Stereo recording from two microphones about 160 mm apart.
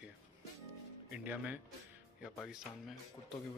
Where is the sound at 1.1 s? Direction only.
10° right (ahead or behind).